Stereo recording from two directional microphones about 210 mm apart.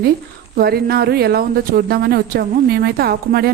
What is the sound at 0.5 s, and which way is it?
Speech, 45° right (ahead or behind).